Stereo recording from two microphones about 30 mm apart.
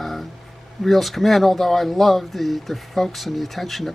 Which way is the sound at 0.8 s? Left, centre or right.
Centre.